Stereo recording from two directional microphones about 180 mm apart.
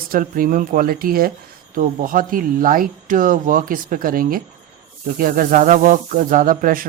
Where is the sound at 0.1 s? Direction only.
50° right (ahead or behind).